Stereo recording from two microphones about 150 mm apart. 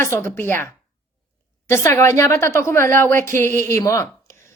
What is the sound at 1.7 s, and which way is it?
A woman's voice, 15° left (ahead or behind).